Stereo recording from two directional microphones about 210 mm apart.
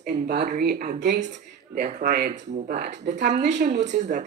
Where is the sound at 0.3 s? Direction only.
50° right (ahead or behind).